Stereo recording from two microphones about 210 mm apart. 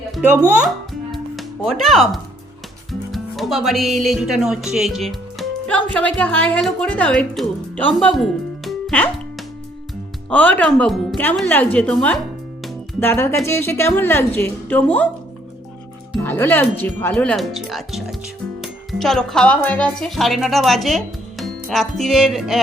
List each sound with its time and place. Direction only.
0.2 s speech: 10° right (ahead or behind)
1.1 s music: centre (ahead or behind)
3.1 s speech: centre (ahead or behind)
10.2 s speech: 5° left (ahead or behind)
12.6 s music: centre (ahead or behind)
13.1 s a woman's voice: 10° left (ahead or behind)
16.2 s a woman's voice: 10° left (ahead or behind)